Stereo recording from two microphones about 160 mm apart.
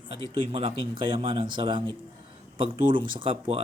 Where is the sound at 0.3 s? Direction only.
35° right (ahead or behind).